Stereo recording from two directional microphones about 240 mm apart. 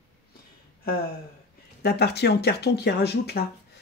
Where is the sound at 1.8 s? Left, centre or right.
Left.